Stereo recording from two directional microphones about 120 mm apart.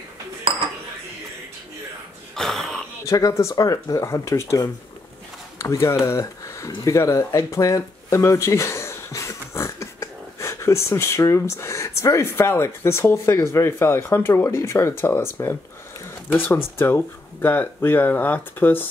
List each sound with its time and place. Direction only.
2.3 s throat clearing: centre (ahead or behind)
3.1 s speech: 30° left (ahead or behind)